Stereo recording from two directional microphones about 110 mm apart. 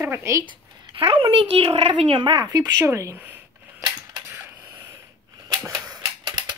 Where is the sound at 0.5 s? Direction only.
55° right (ahead or behind).